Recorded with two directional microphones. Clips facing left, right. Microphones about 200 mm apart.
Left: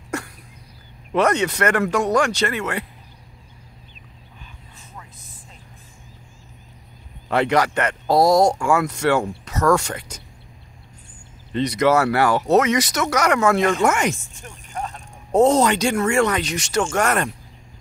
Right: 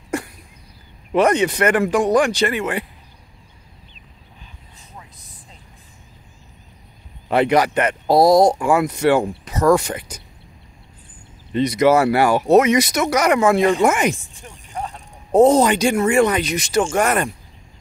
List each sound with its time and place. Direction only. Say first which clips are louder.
1.1 s speech: right 3 dB; 15° right (ahead or behind)
7.2 s speech: right 3 dB; 15° right (ahead or behind)
8.2 s speech: right 3 dB; 35° right (ahead or behind)
8.5 s speech: right 2 dB; 15° right (ahead or behind)
11.5 s speech: right 3 dB; 10° right (ahead or behind)